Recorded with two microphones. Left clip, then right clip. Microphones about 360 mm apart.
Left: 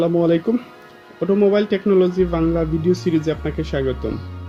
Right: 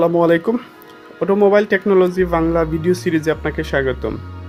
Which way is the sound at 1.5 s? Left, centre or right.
Centre.